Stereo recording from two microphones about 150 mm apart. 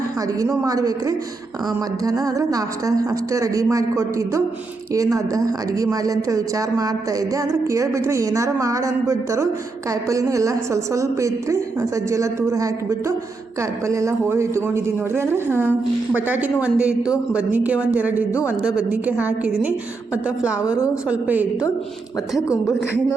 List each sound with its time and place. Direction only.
0.3 s a woman's voice: 25° right (ahead or behind)